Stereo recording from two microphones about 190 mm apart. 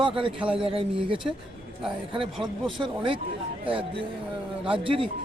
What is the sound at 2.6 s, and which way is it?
A man's voice, 25° right (ahead or behind).